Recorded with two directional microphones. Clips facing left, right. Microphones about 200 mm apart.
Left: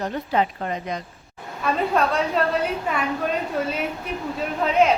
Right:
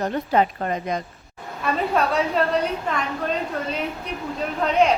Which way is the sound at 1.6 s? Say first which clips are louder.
Left 1 dB; centre (ahead or behind).